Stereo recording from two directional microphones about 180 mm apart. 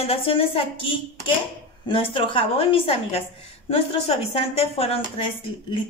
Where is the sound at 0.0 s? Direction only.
30° left (ahead or behind).